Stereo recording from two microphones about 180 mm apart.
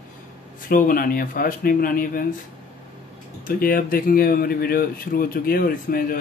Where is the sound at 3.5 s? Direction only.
55° left (ahead or behind).